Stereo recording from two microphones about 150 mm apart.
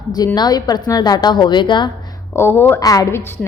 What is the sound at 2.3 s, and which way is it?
A woman's voice, 15° left (ahead or behind).